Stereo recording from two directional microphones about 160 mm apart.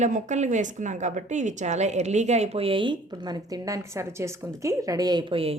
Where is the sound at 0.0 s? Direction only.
50° right (ahead or behind).